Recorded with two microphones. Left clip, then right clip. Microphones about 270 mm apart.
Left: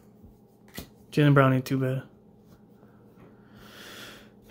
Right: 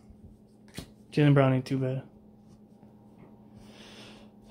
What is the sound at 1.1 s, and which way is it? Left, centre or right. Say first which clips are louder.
Speech: left 3 dB; centre.